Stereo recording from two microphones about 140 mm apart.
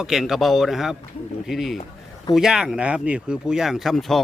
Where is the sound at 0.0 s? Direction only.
5° right (ahead or behind).